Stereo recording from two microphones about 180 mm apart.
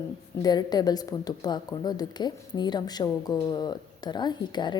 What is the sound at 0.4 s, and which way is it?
A woman's voice, 20° left (ahead or behind).